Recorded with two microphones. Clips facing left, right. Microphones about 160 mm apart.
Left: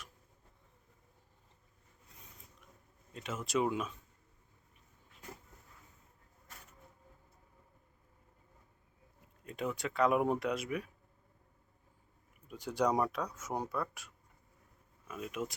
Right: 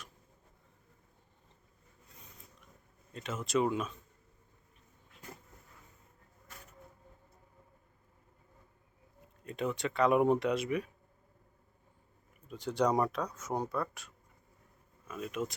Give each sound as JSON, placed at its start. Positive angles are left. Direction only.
{"t": 3.1, "sound": "speech", "side_deg": 5}
{"t": 9.4, "sound": "speech", "side_deg": 5}
{"t": 12.5, "sound": "speech", "side_deg": 10}